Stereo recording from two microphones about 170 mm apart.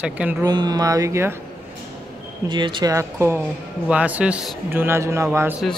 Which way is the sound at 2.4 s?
30° right (ahead or behind).